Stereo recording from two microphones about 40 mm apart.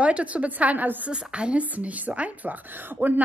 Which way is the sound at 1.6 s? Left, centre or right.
Right.